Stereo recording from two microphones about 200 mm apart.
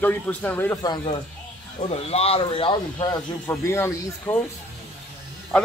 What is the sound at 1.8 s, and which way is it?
Speech, 30° left (ahead or behind).